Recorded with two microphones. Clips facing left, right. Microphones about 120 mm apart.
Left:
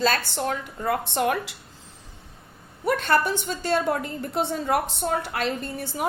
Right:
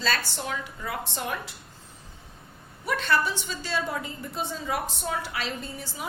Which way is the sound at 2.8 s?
50° left (ahead or behind).